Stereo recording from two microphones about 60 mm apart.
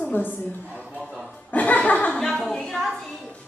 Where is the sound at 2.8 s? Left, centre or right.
Centre.